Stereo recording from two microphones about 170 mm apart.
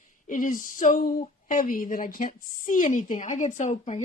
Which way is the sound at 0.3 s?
50° left (ahead or behind).